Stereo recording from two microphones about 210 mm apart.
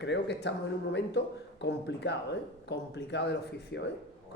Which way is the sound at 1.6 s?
55° left (ahead or behind).